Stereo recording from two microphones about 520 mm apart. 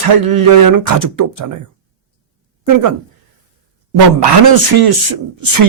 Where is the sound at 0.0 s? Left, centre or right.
Right.